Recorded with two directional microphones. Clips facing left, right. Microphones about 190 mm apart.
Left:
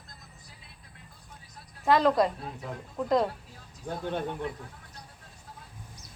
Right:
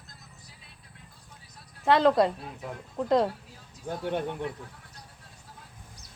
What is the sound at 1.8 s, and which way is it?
Speech, 25° right (ahead or behind).